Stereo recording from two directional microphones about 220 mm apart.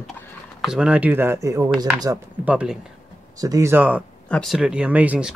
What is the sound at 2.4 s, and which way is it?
Speech, 5° right (ahead or behind).